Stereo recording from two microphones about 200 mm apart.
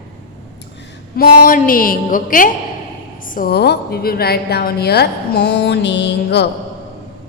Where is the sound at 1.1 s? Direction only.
45° left (ahead or behind).